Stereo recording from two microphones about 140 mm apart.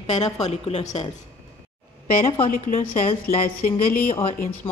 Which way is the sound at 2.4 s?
75° left (ahead or behind).